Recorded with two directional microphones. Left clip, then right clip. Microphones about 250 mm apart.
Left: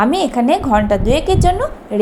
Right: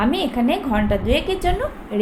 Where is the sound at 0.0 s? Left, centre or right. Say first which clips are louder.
Left 6 dB; left.